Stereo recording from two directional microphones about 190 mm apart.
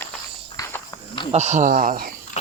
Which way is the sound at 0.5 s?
20° left (ahead or behind).